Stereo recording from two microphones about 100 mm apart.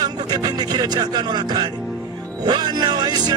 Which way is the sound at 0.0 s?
40° right (ahead or behind).